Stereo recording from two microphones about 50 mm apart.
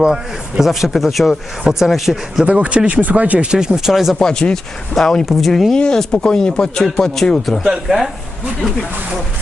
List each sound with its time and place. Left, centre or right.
0.0 s a man's voice: centre
0.6 s speech: centre
2.4 s speech: right; by 4.2 s centre
4.2 s speech: centre
5.7 s speech: centre
7.9 s speech: centre